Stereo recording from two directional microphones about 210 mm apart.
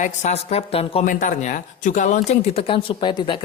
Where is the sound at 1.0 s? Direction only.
40° left (ahead or behind).